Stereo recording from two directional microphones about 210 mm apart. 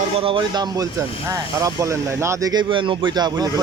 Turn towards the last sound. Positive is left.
turn(degrees=-20)  # may be behind; listen again after turning